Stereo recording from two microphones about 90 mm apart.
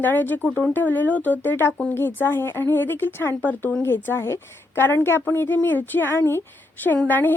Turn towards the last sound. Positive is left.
turn(degrees=20)  # may be behind; listen again after turning